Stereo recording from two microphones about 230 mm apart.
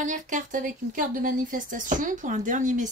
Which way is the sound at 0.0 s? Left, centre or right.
Right.